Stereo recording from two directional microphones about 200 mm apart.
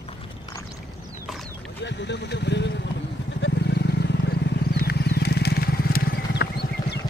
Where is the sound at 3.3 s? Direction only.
65° left (ahead or behind).